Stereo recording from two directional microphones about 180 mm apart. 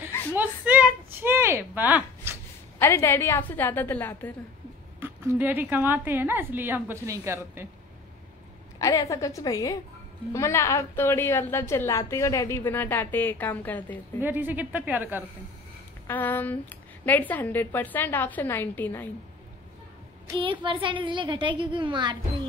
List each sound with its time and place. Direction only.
0.3 s a sound: 10° right (ahead or behind)
2.8 s a woman's voice: 15° left (ahead or behind)
5.0 s a woman's voice: 10° right (ahead or behind)
8.7 s a woman's voice: 20° left (ahead or behind)
14.2 s a woman's voice: 10° right (ahead or behind)
16.1 s a woman's voice: 10° left (ahead or behind)
20.3 s a woman's voice: 30° right (ahead or behind)